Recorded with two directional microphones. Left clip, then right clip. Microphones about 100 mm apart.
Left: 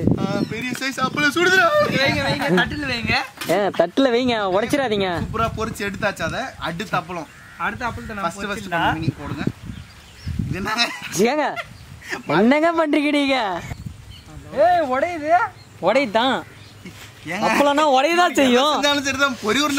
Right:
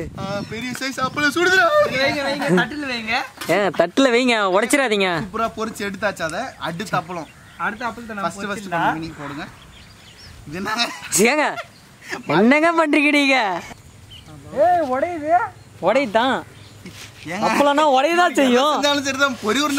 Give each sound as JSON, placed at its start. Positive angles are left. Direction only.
{"t": 0.2, "sound": "speech", "side_deg": -10}
{"t": 8.2, "sound": "speech", "side_deg": -10}
{"t": 10.5, "sound": "speech", "side_deg": -10}
{"t": 14.5, "sound": "speech", "side_deg": 30}
{"t": 15.8, "sound": "speech", "side_deg": 5}
{"t": 17.3, "sound": "speech", "side_deg": -5}
{"t": 18.8, "sound": "speech", "side_deg": -10}